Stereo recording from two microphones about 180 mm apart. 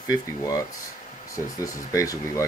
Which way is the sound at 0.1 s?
20° left (ahead or behind).